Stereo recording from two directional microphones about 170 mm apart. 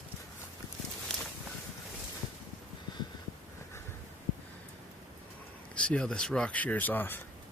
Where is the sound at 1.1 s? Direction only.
5° left (ahead or behind).